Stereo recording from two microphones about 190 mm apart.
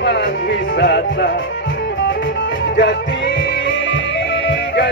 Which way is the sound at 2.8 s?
70° left (ahead or behind).